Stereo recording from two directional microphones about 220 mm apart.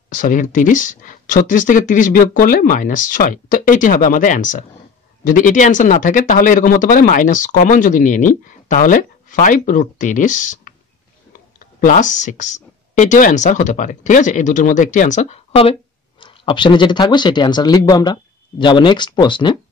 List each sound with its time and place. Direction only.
0.1 s speech: 35° left (ahead or behind); by 19.6 s 20° left (ahead or behind)